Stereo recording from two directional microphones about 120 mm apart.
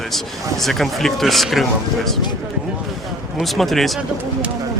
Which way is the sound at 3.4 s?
Centre (ahead or behind).